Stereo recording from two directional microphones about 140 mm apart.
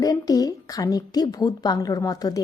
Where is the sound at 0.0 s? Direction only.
25° left (ahead or behind).